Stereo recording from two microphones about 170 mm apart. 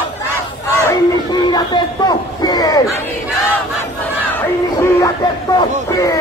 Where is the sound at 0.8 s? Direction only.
25° left (ahead or behind).